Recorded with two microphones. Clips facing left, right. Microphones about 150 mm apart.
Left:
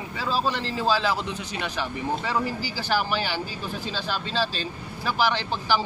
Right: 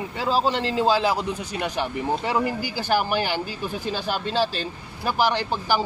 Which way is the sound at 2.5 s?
55° right (ahead or behind).